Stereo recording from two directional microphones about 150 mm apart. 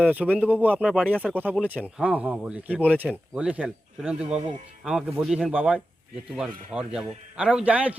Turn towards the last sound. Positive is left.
turn(degrees=-10)  # may be behind; listen again after turning